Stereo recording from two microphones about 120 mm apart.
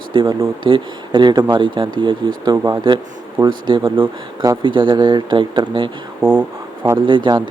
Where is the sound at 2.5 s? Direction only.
30° right (ahead or behind).